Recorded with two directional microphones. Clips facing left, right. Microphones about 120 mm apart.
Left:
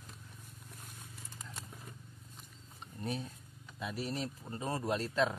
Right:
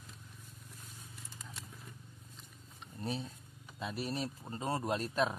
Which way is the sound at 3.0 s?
30° right (ahead or behind).